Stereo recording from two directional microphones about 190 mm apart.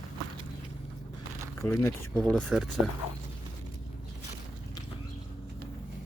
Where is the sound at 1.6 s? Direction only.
10° left (ahead or behind).